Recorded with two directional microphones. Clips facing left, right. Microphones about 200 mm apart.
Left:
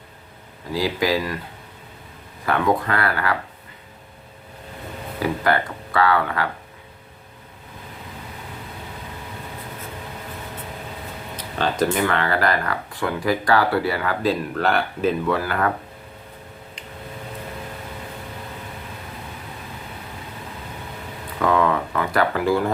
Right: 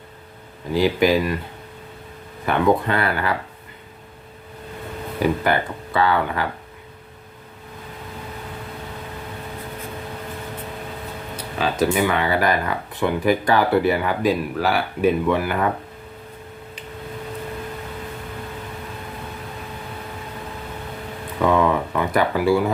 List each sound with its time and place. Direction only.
0.7 s speech: 25° right (ahead or behind)
2.5 s speech: 20° right (ahead or behind)
5.2 s speech: 25° right (ahead or behind)
11.3 s speech: 5° right (ahead or behind)
14.5 s speech: 5° right (ahead or behind)
15.3 s speech: 15° right (ahead or behind)
21.4 s a sound: 20° right (ahead or behind)
22.4 s speech: 5° right (ahead or behind)